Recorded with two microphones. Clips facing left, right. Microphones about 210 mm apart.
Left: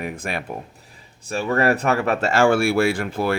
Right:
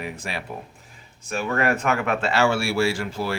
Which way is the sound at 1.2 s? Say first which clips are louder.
Left 4 dB; 35° left (ahead or behind).